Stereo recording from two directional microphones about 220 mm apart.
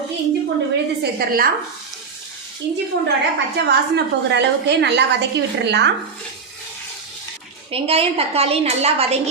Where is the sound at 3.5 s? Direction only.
50° right (ahead or behind).